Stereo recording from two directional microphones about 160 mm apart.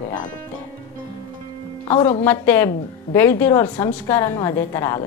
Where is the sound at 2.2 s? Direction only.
15° left (ahead or behind).